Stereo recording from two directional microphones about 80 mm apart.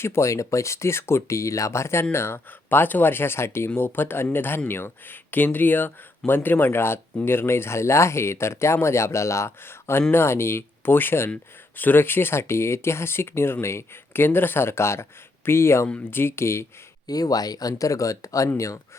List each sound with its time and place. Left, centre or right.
0.0 s speech: left
17.1 s speech: left